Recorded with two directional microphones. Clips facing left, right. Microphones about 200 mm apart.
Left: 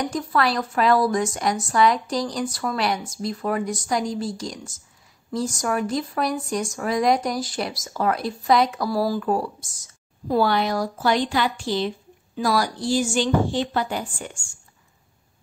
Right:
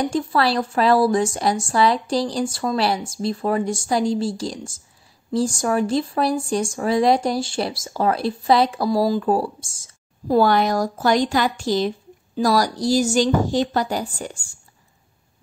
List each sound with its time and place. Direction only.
0.0 s speech: 30° right (ahead or behind)
10.3 s a woman's voice: 45° right (ahead or behind)